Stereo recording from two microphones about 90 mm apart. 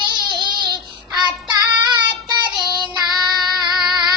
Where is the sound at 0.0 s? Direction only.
50° right (ahead or behind).